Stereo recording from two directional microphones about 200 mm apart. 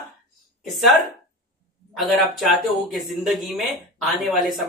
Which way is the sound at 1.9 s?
Centre (ahead or behind).